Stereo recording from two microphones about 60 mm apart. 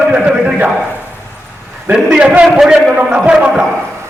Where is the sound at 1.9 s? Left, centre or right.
Centre.